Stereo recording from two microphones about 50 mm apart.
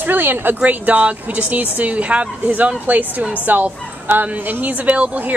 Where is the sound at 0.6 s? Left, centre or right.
Right.